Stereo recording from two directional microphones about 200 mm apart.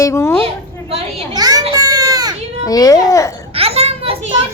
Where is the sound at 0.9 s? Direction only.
20° right (ahead or behind).